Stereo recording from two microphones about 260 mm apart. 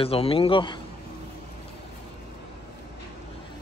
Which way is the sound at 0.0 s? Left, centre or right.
Left.